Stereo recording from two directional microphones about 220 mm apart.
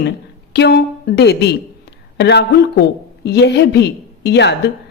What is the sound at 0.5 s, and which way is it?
A woman's voice, 45° left (ahead or behind).